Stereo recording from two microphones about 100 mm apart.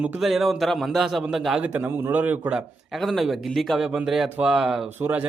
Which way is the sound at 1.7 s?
20° right (ahead or behind).